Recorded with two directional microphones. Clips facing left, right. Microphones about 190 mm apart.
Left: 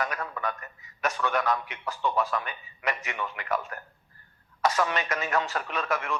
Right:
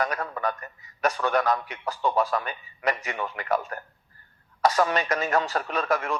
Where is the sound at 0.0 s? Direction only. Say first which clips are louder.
Right 4 dB; 40° right (ahead or behind).